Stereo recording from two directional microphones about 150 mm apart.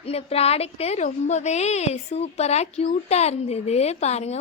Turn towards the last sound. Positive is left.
turn(degrees=45)  # may be behind; listen again after turning